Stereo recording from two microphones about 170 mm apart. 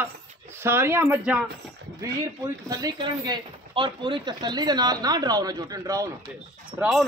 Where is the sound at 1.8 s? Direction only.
90° right.